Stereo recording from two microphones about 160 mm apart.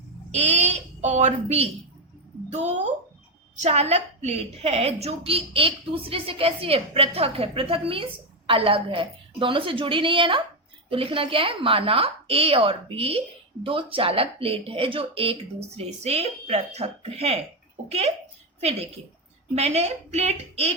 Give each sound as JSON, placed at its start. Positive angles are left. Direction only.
{"t": 0.3, "sound": "a woman's voice", "side_deg": -45}
{"t": 19.5, "sound": "a woman's voice", "side_deg": -45}